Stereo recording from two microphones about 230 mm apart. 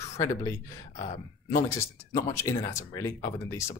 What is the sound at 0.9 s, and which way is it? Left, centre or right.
Speech, left.